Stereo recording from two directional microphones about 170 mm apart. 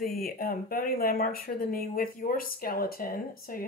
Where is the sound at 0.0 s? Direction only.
65° left (ahead or behind).